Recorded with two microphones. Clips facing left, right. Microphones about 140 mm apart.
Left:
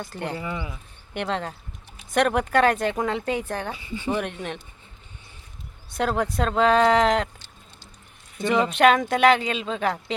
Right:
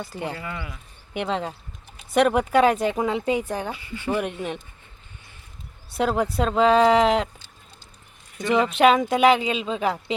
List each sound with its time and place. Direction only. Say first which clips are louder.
0.0 s speech: even; 5° right (ahead or behind)
0.3 s speech: left 3 dB; 20° left (ahead or behind)
1.1 s a woman's voice: right 1 dB; 5° right (ahead or behind)
3.8 s speech: left 1 dB; 15° left (ahead or behind)
4.1 s a woman's voice: right 2 dB; 5° right (ahead or behind)
6.0 s a woman's voice: right 2 dB; 5° right (ahead or behind)
8.7 s a woman's voice: right 1 dB; 5° right (ahead or behind)